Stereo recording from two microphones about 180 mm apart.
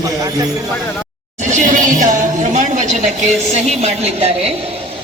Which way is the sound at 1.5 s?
45° right (ahead or behind).